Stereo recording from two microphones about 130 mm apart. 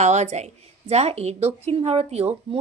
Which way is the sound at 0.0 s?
60° right (ahead or behind).